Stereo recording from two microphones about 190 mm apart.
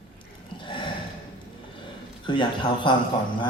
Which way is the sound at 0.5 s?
25° left (ahead or behind).